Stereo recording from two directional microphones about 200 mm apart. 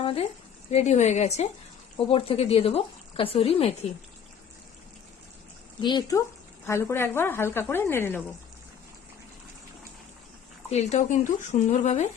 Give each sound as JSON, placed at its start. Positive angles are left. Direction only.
{"t": 0.0, "sound": "a woman's voice", "side_deg": 30}
{"t": 5.8, "sound": "speech", "side_deg": 20}
{"t": 10.7, "sound": "a woman's voice", "side_deg": 35}